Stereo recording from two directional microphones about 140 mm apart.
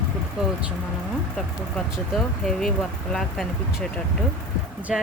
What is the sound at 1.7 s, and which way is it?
Speech, centre (ahead or behind).